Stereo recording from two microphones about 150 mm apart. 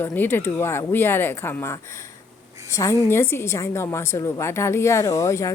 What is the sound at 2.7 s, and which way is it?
A woman's voice, 20° left (ahead or behind).